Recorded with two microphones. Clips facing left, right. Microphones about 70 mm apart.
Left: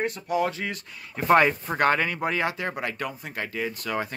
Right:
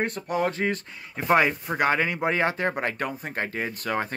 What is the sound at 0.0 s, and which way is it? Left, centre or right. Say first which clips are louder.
Speech: even; right.